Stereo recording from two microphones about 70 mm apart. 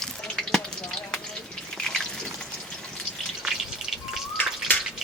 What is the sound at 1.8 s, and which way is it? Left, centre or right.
Water, centre.